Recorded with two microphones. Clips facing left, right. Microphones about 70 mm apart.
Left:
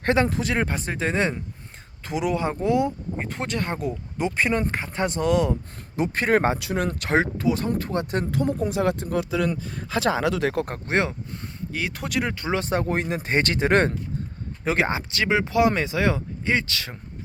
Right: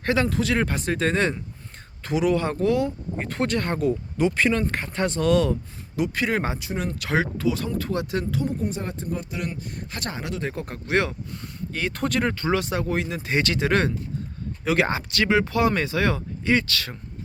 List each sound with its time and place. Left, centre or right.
0.0 s speech: left
6.0 s speech: left
6.6 s speech: left
7.0 s speech: left
8.2 s speech: left
8.6 s speech: left
10.1 s speech: left
10.8 s speech: left
11.7 s speech: centre
12.5 s speech: left
14.8 s speech: centre